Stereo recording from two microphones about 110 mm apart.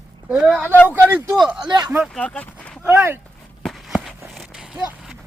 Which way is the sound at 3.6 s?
Centre (ahead or behind).